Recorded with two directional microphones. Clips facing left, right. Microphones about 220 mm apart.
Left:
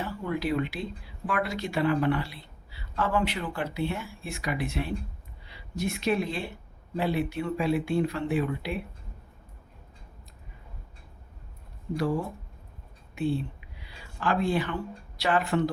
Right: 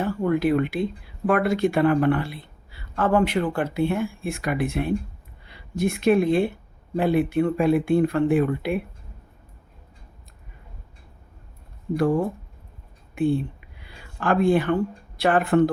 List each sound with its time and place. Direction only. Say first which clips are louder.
0.0 s speech: right 9 dB; 50° right (ahead or behind)
11.9 s speech: right 7 dB; 50° right (ahead or behind)
13.1 s a sound: right 6 dB; 50° right (ahead or behind)
15.2 s speech: right 7 dB; 55° right (ahead or behind)